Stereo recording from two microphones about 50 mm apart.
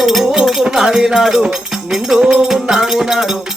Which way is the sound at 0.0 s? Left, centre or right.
Centre.